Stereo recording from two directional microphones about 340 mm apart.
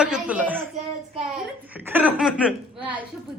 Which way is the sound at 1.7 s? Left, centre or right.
Centre.